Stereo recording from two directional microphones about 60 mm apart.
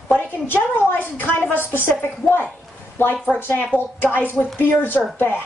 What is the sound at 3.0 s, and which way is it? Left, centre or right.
Speech, left.